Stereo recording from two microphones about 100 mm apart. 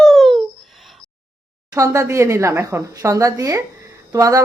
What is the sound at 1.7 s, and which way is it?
A woman's voice, 30° right (ahead or behind).